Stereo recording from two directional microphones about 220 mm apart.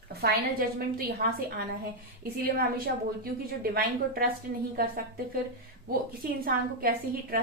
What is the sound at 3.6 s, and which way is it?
A woman's voice, 40° right (ahead or behind).